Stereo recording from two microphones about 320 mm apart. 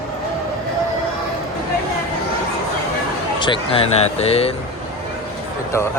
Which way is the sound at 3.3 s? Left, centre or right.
Centre.